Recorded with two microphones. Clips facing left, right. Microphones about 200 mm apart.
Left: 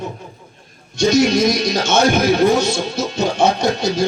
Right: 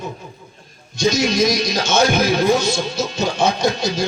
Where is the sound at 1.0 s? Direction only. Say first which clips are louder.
Left 3 dB; 60° left (ahead or behind).